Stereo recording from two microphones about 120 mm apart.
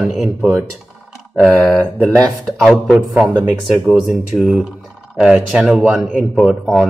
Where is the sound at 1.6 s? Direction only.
5° left (ahead or behind).